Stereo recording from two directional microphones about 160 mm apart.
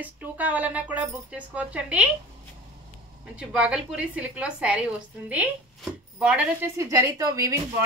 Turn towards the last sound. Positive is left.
turn(degrees=-20)  # may be behind; listen again after turning